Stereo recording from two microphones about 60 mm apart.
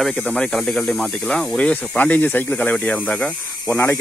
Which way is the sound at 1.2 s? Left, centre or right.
Centre.